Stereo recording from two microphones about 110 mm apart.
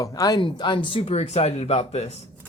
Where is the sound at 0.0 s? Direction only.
35° left (ahead or behind); by 2.2 s 80° left.